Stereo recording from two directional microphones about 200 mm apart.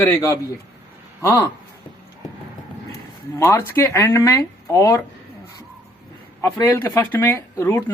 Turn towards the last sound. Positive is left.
turn(degrees=15)  # may be behind; listen again after turning